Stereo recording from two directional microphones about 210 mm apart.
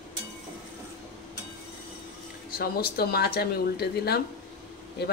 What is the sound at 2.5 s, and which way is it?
Speech, 45° left (ahead or behind).